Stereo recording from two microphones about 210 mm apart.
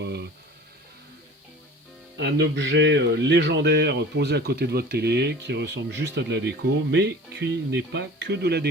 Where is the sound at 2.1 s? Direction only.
55° right (ahead or behind).